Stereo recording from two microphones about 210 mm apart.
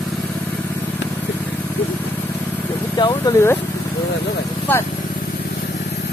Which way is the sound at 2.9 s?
20° left (ahead or behind).